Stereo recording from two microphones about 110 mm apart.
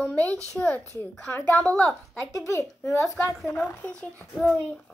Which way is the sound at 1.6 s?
5° left (ahead or behind).